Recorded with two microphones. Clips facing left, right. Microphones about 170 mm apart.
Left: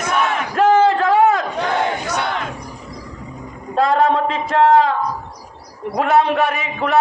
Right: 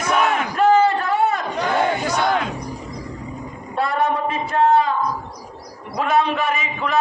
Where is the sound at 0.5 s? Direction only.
90° left.